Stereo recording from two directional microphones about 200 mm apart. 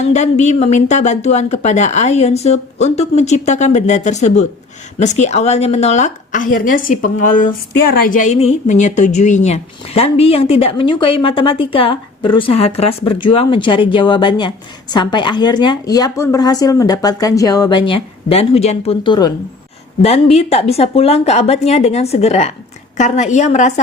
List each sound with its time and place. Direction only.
0.1 s a woman's voice: 35° left (ahead or behind)